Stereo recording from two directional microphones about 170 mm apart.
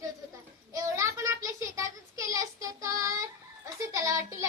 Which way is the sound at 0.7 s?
20° right (ahead or behind).